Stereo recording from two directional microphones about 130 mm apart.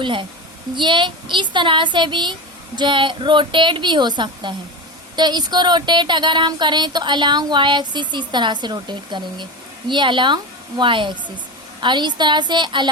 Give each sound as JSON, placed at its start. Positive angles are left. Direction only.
{"t": 0.0, "sound": "speech", "side_deg": -40}